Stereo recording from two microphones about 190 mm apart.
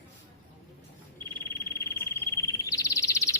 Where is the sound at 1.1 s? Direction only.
15° left (ahead or behind).